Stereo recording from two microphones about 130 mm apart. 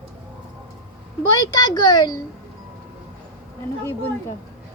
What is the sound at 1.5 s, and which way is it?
Speech, 30° left (ahead or behind).